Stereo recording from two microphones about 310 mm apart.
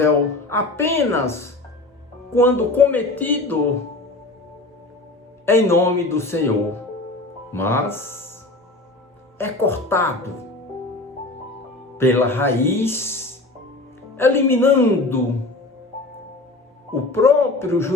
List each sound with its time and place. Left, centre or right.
0.0 s speech: centre
5.5 s speech: centre
7.5 s speech: centre
9.4 s speech: centre
11.9 s speech: centre
16.9 s speech: centre